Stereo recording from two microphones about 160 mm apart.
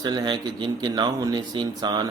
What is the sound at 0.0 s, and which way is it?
Speech, 25° right (ahead or behind).